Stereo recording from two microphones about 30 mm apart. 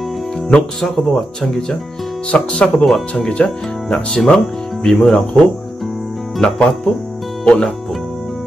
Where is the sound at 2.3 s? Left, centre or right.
Left.